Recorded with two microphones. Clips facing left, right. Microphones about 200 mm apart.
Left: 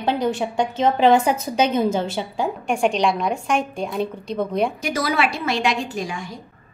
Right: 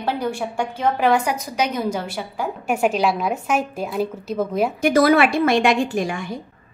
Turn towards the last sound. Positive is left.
turn(degrees=-55)  # may be behind; listen again after turning